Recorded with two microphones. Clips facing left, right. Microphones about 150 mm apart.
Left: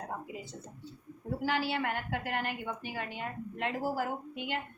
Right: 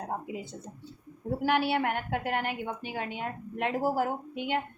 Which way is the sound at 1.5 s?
60° right (ahead or behind).